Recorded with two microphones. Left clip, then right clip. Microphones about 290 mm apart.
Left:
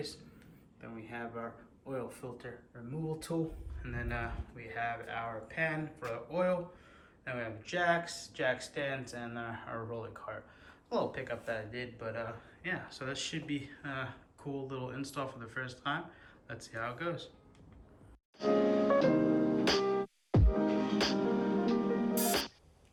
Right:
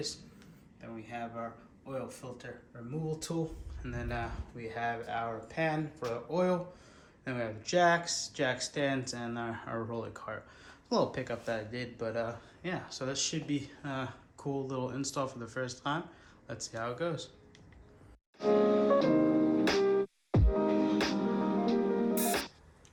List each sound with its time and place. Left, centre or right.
0.8 s speech: centre
3.8 s speech: centre
18.3 s music: centre
19.8 s music: centre
20.3 s music: centre
20.6 s music: centre
21.8 s music: centre